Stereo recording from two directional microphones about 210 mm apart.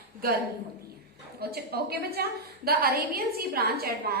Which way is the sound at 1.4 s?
50° right (ahead or behind).